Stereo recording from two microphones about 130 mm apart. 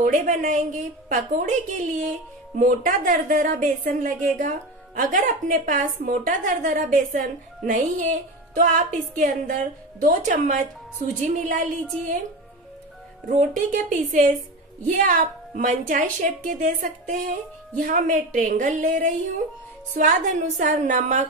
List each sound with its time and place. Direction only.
0.0 s a woman's voice: 80° right
13.4 s speech: 80° right
17.7 s a woman's voice: 85° right
20.0 s a woman's voice: 75° right (ahead or behind)